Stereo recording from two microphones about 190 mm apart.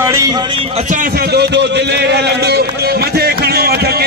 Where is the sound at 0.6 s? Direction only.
35° right (ahead or behind).